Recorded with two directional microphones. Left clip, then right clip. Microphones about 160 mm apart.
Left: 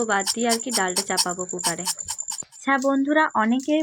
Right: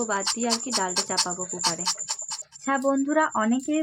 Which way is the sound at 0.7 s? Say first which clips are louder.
Left 2 dB; 15° left (ahead or behind).